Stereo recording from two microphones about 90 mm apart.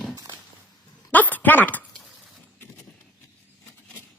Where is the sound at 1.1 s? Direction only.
20° left (ahead or behind).